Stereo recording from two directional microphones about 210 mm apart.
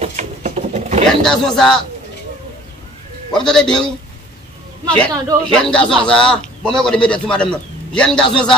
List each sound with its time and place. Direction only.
0.0 s a sound: 30° right (ahead or behind)
1.0 s a man's voice: centre (ahead or behind)
3.4 s a man's voice: 5° left (ahead or behind)